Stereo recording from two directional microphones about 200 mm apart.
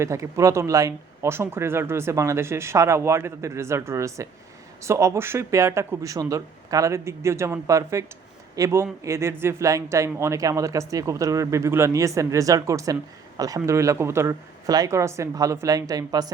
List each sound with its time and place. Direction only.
0.0 s speech: 15° right (ahead or behind)